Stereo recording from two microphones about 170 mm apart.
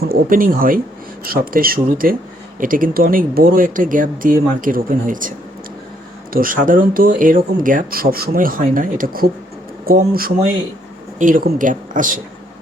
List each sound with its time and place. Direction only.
0.1 s speech: 55° right (ahead or behind)
6.3 s speech: 55° right (ahead or behind)